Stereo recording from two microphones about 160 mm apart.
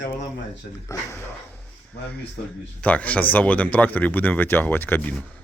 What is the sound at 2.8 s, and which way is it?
Speech, 10° left (ahead or behind).